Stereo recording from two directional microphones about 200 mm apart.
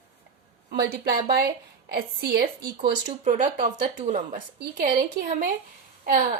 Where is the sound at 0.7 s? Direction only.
55° right (ahead or behind).